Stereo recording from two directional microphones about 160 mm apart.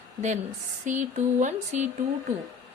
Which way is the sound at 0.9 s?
50° right (ahead or behind).